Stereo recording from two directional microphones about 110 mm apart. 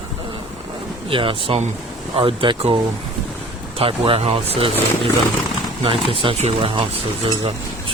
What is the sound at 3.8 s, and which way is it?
Speech, 60° right (ahead or behind).